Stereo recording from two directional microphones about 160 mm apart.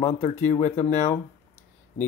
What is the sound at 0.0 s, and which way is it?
Speech, 45° left (ahead or behind).